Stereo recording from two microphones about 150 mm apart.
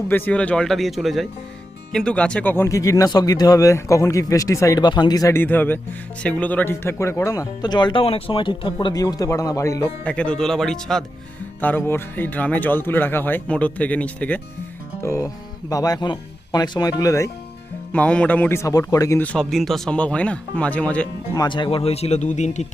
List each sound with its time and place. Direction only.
0.1 s speech: 10° left (ahead or behind)
10.0 s speech: 5° left (ahead or behind)
11.6 s speech: 15° left (ahead or behind)
17.9 s speech: 10° left (ahead or behind)
19.2 s speech: 5° left (ahead or behind)
21.3 s speech: 30° left (ahead or behind); by 22.6 s 50° left (ahead or behind)